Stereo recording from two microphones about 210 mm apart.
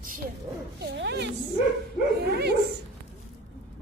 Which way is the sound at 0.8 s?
55° right (ahead or behind).